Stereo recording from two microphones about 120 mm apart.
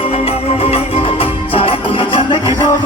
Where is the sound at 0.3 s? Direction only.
55° left (ahead or behind).